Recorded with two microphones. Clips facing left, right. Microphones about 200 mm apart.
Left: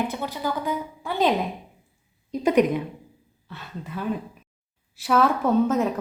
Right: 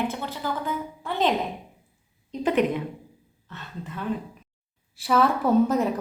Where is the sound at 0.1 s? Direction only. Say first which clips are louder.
Left 2 dB; 15° left (ahead or behind).